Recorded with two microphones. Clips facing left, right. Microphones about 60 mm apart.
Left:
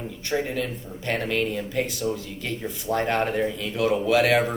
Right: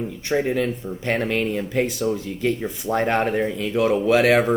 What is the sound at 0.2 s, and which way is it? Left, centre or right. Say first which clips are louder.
Speech: right 5 dB; right.